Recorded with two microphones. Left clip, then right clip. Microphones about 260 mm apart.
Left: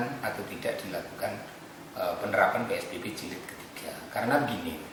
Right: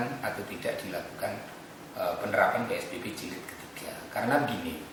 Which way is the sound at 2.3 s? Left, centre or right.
Centre.